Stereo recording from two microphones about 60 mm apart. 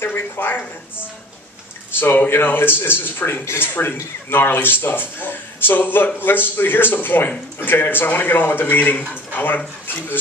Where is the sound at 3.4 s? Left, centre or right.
Left.